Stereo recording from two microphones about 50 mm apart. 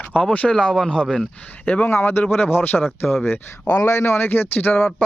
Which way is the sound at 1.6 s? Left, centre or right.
Left.